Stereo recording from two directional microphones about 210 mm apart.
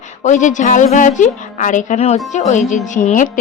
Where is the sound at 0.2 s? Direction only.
35° left (ahead or behind).